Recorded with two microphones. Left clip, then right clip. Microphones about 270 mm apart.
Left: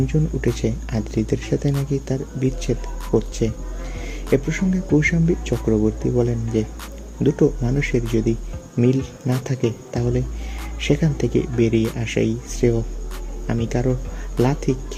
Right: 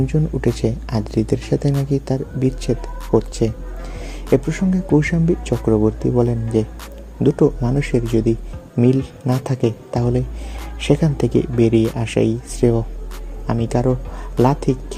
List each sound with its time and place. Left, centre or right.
0.1 s speech: right